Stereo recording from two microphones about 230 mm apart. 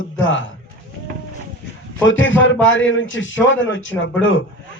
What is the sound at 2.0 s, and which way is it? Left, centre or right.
A man's voice, left.